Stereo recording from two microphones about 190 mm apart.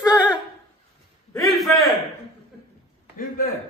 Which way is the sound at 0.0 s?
5° right (ahead or behind).